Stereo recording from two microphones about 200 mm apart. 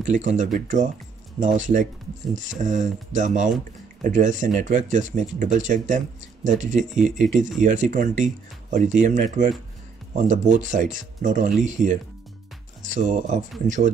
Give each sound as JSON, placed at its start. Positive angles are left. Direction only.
{"t": 0.0, "sound": "speech", "side_deg": -35}
{"t": 10.6, "sound": "speech", "side_deg": -40}